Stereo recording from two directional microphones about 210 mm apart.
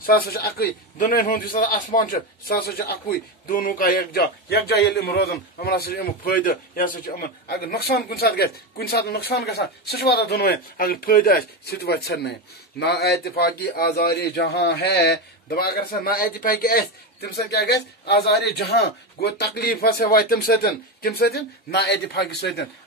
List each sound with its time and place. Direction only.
0.0 s speech: 45° left (ahead or behind)